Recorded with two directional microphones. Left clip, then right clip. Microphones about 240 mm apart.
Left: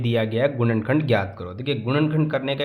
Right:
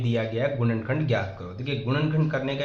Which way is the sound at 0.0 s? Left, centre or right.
Left.